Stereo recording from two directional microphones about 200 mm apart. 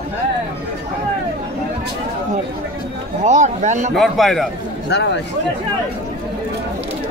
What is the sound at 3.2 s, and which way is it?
Speech, 35° right (ahead or behind).